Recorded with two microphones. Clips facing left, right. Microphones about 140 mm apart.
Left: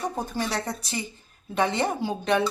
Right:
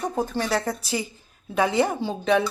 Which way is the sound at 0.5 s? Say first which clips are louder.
Right 5 dB; centre (ahead or behind).